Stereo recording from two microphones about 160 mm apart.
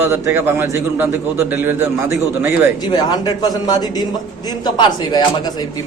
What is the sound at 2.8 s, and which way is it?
Speech, 25° left (ahead or behind).